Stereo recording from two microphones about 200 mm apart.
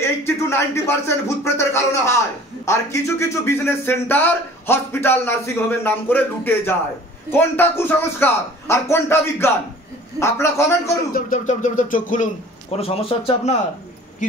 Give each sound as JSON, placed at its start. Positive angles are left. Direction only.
{"t": 0.5, "sound": "a man's voice", "side_deg": 10}
{"t": 11.1, "sound": "a sound", "side_deg": 40}
{"t": 12.7, "sound": "speech", "side_deg": 30}